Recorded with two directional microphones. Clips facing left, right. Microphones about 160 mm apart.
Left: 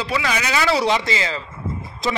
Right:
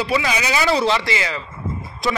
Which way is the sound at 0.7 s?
15° left (ahead or behind).